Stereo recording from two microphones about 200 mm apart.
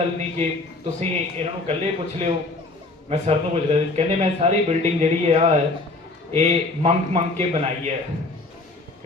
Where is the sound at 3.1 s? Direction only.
30° right (ahead or behind).